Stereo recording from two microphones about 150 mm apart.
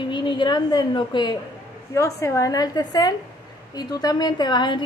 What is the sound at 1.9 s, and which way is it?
A woman's voice, 20° left (ahead or behind).